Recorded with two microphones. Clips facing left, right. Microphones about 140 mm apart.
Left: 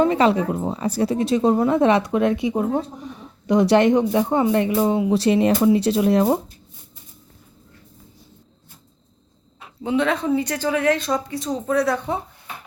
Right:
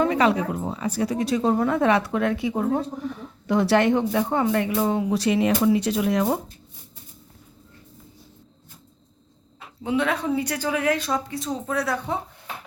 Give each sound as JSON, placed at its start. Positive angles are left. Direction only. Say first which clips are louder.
{"t": 0.0, "sound": "speech", "louder": "left 3 dB", "side_deg": 30}
{"t": 5.2, "sound": "speech", "louder": "left 3 dB", "side_deg": 30}
{"t": 9.8, "sound": "speech", "louder": "left 3 dB", "side_deg": -5}